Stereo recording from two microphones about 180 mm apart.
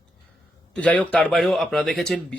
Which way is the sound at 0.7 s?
5° left (ahead or behind).